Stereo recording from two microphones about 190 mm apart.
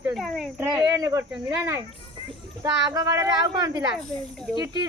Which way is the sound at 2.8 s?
20° right (ahead or behind).